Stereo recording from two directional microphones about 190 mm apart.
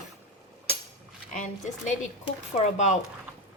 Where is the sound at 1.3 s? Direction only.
40° left (ahead or behind).